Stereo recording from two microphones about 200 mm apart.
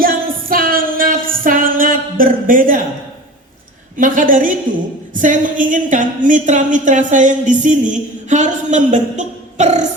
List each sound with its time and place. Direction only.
0.0 s music: 45° right (ahead or behind)
3.9 s a woman's voice: 40° right (ahead or behind)